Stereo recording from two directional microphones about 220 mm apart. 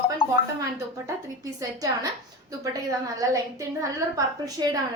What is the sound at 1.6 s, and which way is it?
A woman's voice, 15° right (ahead or behind).